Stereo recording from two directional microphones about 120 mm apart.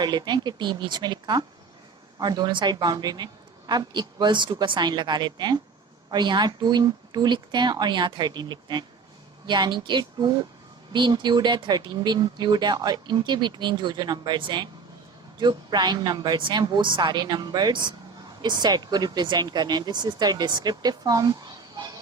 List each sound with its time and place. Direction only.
0.0 s speech: 35° right (ahead or behind)